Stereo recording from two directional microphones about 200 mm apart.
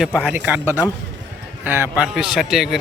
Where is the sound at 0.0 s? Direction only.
Centre (ahead or behind).